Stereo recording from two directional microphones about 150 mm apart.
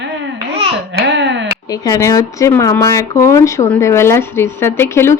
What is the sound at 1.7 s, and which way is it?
Speech, 25° left (ahead or behind).